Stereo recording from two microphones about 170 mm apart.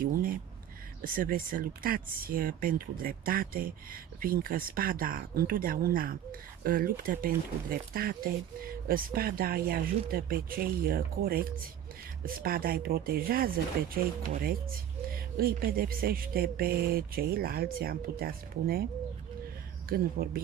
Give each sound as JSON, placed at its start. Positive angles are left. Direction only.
{"t": 0.0, "sound": "a sound", "side_deg": -55}
{"t": 1.0, "sound": "speech", "side_deg": -55}
{"t": 19.9, "sound": "speech", "side_deg": -60}